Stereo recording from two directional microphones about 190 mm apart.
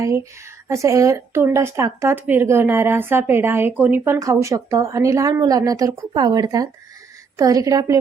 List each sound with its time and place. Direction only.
0.0 s a woman's voice: 15° right (ahead or behind)